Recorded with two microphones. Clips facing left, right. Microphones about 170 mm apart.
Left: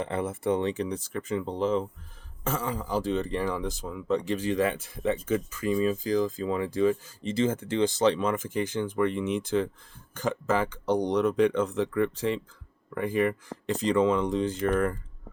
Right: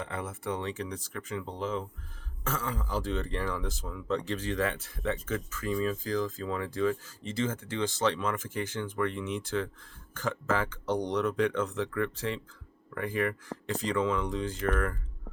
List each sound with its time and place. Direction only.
0.0 s speech: 25° left (ahead or behind)
2.4 s speech: 15° left (ahead or behind)